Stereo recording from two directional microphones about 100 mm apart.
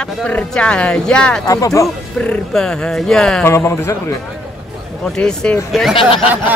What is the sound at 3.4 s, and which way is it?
Speech, 25° left (ahead or behind).